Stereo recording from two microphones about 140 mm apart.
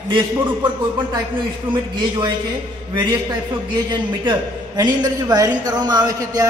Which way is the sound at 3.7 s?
35° right (ahead or behind).